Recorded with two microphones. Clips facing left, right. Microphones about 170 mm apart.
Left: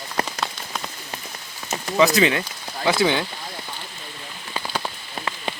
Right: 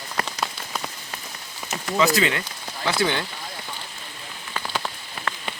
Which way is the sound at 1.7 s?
20° left (ahead or behind).